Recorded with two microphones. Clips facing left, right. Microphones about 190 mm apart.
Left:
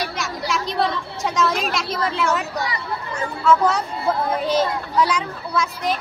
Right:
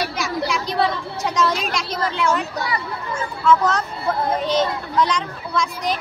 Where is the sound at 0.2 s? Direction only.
Centre (ahead or behind).